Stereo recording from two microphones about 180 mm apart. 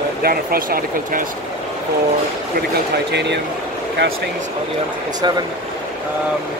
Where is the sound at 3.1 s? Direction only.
70° right (ahead or behind).